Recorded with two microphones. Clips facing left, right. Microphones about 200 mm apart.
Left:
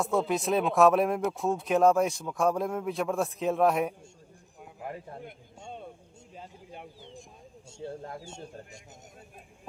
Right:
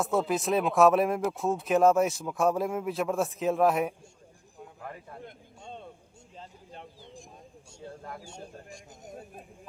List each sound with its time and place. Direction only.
0.0 s speech: centre (ahead or behind)
4.8 s a man's voice: 25° left (ahead or behind)
5.2 s a sound: 10° left (ahead or behind)
8.0 s speech: 25° left (ahead or behind)